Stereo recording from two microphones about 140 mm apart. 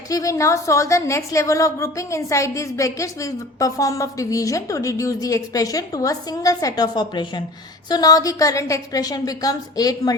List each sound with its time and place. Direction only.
0.1 s a woman's voice: 25° left (ahead or behind)